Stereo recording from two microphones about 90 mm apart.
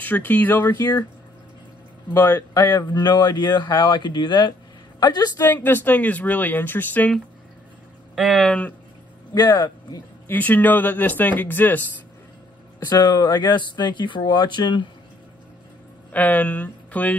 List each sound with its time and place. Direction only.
0.0 s speech: 20° left (ahead or behind)
0.6 s speech: 45° left (ahead or behind)
2.3 s speech: 45° left (ahead or behind)
5.4 s speech: 25° left (ahead or behind)
8.4 s speech: 10° left (ahead or behind)
9.3 s a man's voice: 50° left (ahead or behind)
10.2 s speech: 20° left (ahead or behind)
12.9 s speech: 55° left (ahead or behind)
16.1 s speech: 15° left (ahead or behind)